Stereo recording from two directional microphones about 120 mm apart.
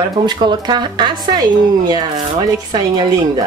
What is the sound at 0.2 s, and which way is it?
Speech, 35° right (ahead or behind).